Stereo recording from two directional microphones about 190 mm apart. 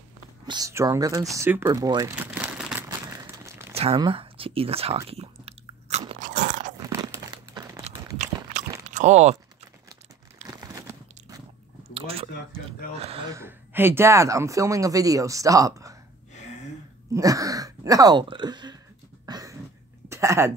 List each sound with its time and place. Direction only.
0.5 s speech: 15° right (ahead or behind)
2.1 s crumpling: 5° right (ahead or behind)
3.7 s biting: 30° right (ahead or behind)
6.8 s crumpling: 15° right (ahead or behind)
8.8 s a sound: 40° right (ahead or behind)
10.6 s biting: 15° right (ahead or behind)
11.9 s a sound: 30° right (ahead or behind)
12.9 s speech: 35° right (ahead or behind)
13.3 s speech: 10° right (ahead or behind)
17.1 s speech: 20° right (ahead or behind)
19.2 s a sound: 20° right (ahead or behind)
20.1 s speech: 15° right (ahead or behind)